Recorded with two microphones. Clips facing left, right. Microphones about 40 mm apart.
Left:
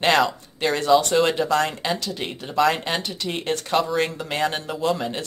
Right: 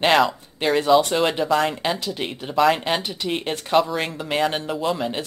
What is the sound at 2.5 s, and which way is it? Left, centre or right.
Speech, centre.